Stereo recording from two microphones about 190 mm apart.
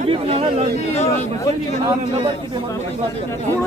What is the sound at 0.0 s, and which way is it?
Chatter, 30° right (ahead or behind).